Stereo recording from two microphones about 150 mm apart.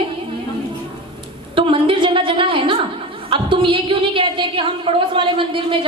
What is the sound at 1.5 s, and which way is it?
A woman's voice, 35° right (ahead or behind).